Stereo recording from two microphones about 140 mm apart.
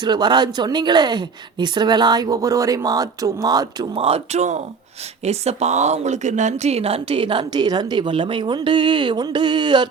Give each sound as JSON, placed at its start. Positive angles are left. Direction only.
{"t": 0.0, "sound": "speech", "side_deg": -30}
{"t": 3.9, "sound": "speech", "side_deg": -45}